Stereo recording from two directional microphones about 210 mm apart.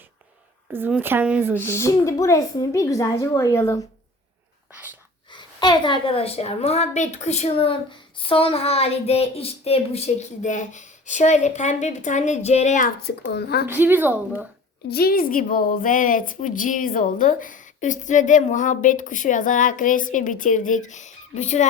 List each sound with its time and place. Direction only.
0.7 s speech: 5° right (ahead or behind)
1.6 s a woman's voice: 10° left (ahead or behind)
5.3 s a woman's voice: 20° left (ahead or behind); by 13.7 s 50° left (ahead or behind)
13.7 s speech: 10° right (ahead or behind)
14.8 s a woman's voice: 45° left (ahead or behind)